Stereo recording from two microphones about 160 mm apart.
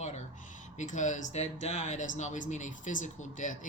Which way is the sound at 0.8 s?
50° left (ahead or behind).